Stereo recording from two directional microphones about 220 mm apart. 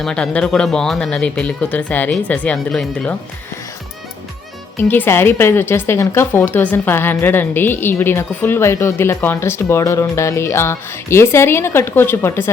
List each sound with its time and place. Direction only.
0.0 s speech: 5° left (ahead or behind)
4.8 s a woman's voice: 10° left (ahead or behind)